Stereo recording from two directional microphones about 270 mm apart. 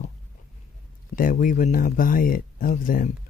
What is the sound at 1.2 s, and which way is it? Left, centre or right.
Speech, left.